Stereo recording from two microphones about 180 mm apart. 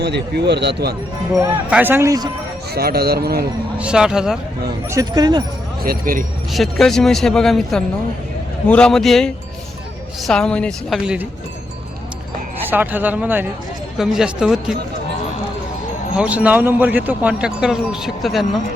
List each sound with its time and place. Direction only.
0.0 s speech: 65° right (ahead or behind)
1.4 s speech: 10° right (ahead or behind)
2.7 s speech: 60° right (ahead or behind)
3.8 s speech: 5° right (ahead or behind)
4.9 s speech: 20° right (ahead or behind)
5.8 s speech: 55° right (ahead or behind)
6.5 s speech: centre (ahead or behind)
12.7 s speech: 10° right (ahead or behind)
16.1 s speech: 5° right (ahead or behind)